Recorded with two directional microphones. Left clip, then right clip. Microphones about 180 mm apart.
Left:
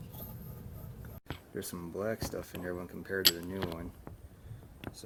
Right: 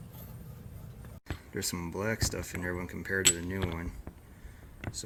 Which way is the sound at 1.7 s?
20° right (ahead or behind).